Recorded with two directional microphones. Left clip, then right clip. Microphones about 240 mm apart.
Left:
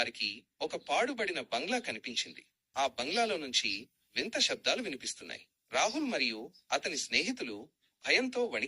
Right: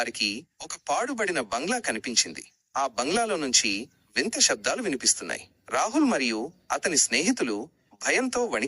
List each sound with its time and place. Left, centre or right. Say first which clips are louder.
0.3 s speech: right 4 dB; right